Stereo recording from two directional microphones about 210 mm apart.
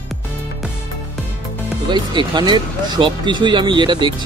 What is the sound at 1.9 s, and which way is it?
Speech, 20° right (ahead or behind).